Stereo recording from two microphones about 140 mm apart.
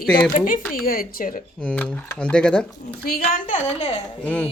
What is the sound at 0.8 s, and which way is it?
Speech, 90° left.